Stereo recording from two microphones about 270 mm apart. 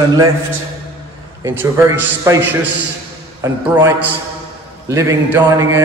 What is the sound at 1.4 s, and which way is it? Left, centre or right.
A man's voice, centre.